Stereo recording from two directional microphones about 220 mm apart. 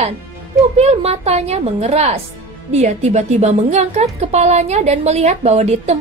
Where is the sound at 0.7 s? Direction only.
30° right (ahead or behind).